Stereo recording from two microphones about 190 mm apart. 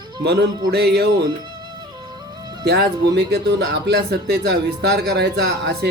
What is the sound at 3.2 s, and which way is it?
A man's voice, 65° right (ahead or behind).